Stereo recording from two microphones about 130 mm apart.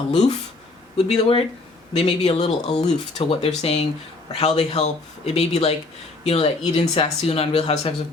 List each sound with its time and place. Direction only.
0.1 s speech: 60° left (ahead or behind)